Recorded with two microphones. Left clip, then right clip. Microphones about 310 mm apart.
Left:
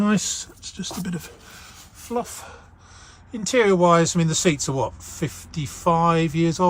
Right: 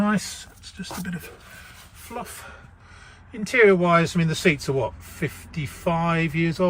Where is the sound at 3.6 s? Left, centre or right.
Centre.